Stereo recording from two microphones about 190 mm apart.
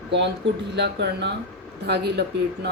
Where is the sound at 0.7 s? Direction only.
65° right (ahead or behind).